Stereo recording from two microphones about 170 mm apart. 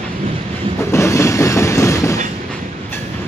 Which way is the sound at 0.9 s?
15° left (ahead or behind).